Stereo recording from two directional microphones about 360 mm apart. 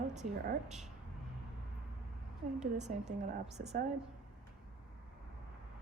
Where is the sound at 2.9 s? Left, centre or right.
Right.